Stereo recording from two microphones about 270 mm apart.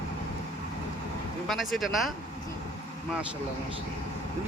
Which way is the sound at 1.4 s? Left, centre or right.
Centre.